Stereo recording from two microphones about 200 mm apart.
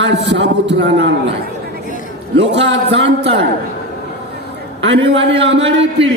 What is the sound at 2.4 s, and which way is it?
Speech, 60° right (ahead or behind).